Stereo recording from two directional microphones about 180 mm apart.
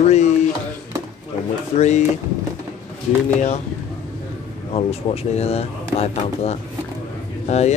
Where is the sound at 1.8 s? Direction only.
40° left (ahead or behind).